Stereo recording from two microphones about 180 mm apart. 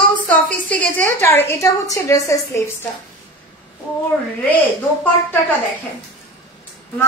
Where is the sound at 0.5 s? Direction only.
10° left (ahead or behind).